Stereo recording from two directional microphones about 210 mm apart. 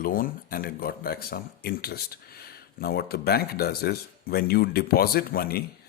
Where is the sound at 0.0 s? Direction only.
40° left (ahead or behind).